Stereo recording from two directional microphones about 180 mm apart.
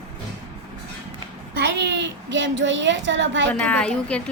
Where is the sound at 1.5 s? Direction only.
80° right.